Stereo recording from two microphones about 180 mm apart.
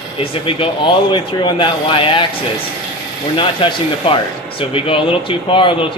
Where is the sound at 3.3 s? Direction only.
30° left (ahead or behind).